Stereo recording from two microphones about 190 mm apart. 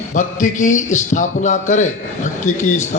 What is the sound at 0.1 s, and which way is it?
A man's voice, 40° left (ahead or behind).